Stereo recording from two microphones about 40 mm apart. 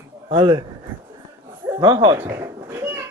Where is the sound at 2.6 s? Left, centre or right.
Right.